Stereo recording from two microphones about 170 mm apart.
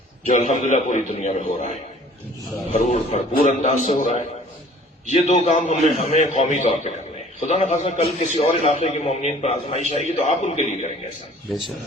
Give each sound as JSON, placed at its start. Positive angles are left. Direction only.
{"t": 0.3, "sound": "a man's voice", "side_deg": 45}